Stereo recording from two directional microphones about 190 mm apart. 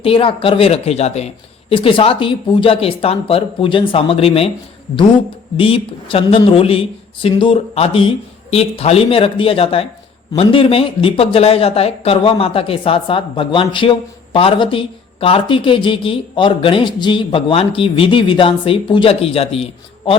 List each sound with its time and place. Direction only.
0.0 s speech: 30° left (ahead or behind)
5.5 s speech: 30° left (ahead or behind)